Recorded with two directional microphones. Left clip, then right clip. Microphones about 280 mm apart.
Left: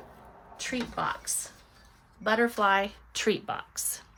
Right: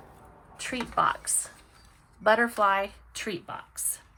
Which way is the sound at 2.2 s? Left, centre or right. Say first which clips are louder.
Right 3 dB; centre.